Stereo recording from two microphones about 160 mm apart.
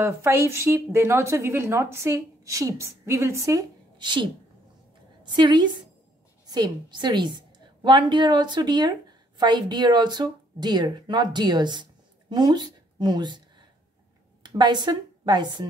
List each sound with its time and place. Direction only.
0.0 s a woman's voice: 15° right (ahead or behind)